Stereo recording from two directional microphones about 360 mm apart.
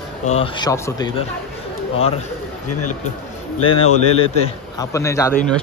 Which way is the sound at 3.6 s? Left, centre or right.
Centre.